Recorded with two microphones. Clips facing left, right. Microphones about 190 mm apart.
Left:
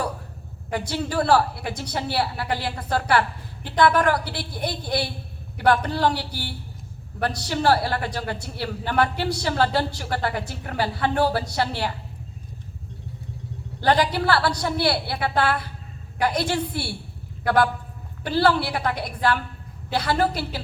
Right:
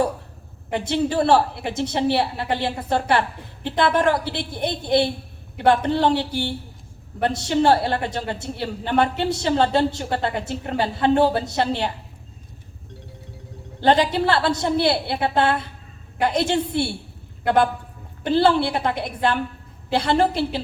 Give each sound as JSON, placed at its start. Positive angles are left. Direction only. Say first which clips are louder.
{"t": 0.7, "sound": "a man's voice", "louder": "right 5 dB", "side_deg": -25}
{"t": 13.8, "sound": "a man's voice", "louder": "right 3 dB", "side_deg": -25}